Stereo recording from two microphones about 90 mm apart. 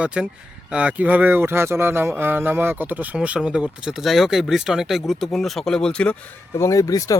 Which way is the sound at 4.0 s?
Centre (ahead or behind).